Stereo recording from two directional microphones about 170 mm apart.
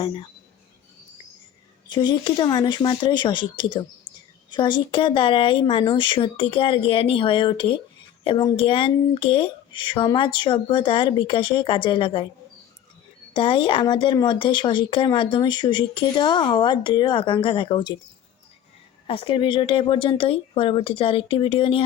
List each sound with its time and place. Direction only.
0.0 s speech: 30° left (ahead or behind)
1.9 s speech: 25° left (ahead or behind)
13.3 s speech: 30° left (ahead or behind)
19.0 s speech: 30° left (ahead or behind)